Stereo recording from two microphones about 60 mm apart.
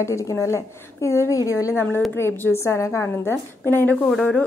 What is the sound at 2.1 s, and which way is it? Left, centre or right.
A woman's voice, left.